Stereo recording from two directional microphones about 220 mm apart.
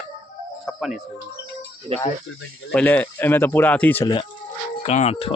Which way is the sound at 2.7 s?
5° left (ahead or behind).